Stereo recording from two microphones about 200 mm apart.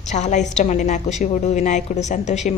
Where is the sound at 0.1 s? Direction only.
35° left (ahead or behind).